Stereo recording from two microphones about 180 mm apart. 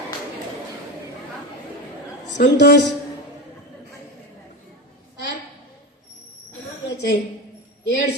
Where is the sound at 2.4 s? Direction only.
75° left (ahead or behind).